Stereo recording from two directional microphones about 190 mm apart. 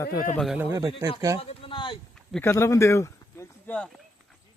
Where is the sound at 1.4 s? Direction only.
30° left (ahead or behind).